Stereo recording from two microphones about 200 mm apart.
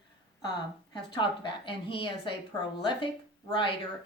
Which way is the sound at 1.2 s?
25° left (ahead or behind).